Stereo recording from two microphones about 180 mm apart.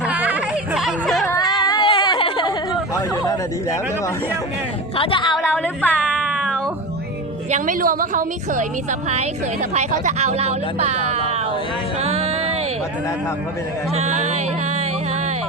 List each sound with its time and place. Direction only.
0.0 s music: 5° right (ahead or behind)
1.3 s chatter: 20° left (ahead or behind)
1.6 s a sound: 25° left (ahead or behind)
4.9 s a woman's voice: 30° left (ahead or behind)
5.5 s female singing: 10° left (ahead or behind)
6.2 s cat: 5° right (ahead or behind)
7.5 s a woman's voice: 50° right (ahead or behind)
11.9 s music: 35° right (ahead or behind)
13.9 s music: 40° right (ahead or behind)